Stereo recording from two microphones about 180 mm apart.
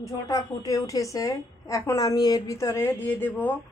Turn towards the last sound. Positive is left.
turn(degrees=10)  # may be behind; listen again after turning